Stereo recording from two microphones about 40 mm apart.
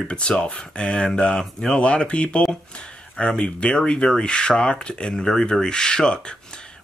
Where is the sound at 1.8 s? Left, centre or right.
Left.